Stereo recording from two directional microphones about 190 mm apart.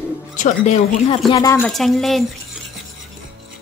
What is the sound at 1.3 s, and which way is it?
Speech, 15° left (ahead or behind).